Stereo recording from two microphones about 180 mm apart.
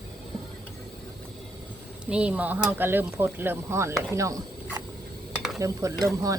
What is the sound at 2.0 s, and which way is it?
Speech, 5° right (ahead or behind).